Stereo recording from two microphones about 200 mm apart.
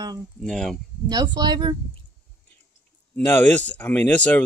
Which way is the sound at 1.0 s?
20° right (ahead or behind).